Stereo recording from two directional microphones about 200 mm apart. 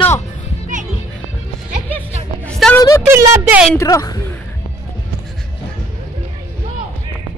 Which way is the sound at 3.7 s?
15° left (ahead or behind).